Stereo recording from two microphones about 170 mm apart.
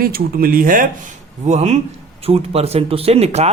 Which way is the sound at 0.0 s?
60° right (ahead or behind).